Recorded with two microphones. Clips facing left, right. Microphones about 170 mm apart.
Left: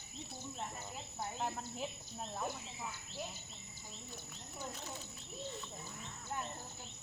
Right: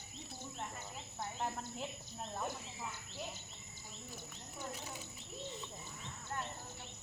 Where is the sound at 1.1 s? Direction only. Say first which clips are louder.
Even; 5° left (ahead or behind).